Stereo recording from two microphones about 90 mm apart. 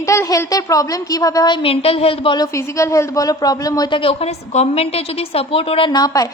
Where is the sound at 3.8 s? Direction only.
80° left.